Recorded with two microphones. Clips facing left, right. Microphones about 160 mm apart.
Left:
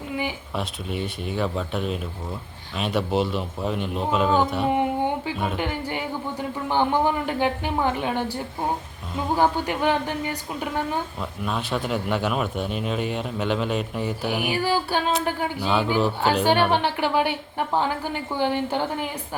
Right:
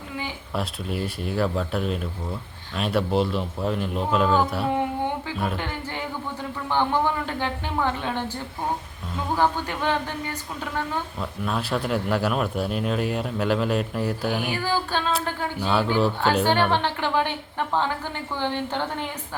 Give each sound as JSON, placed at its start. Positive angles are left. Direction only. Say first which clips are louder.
{"t": 0.5, "sound": "a man's voice", "louder": "right 1 dB", "side_deg": 0}
{"t": 4.6, "sound": "a sound", "louder": "left 2 dB", "side_deg": 20}
{"t": 6.7, "sound": "a woman's voice", "louder": "left 1 dB", "side_deg": 15}
{"t": 11.2, "sound": "a man's voice", "louder": "right 1 dB", "side_deg": 0}